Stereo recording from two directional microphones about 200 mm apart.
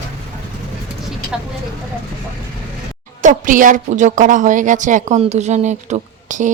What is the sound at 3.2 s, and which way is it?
A woman's voice, 40° right (ahead or behind).